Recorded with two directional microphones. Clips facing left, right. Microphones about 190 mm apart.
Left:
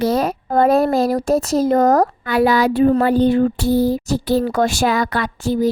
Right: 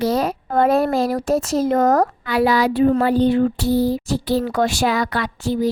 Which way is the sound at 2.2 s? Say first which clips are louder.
Left 2 dB; 50° left (ahead or behind).